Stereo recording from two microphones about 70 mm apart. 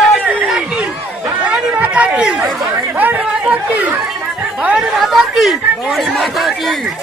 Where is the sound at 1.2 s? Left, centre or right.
Centre.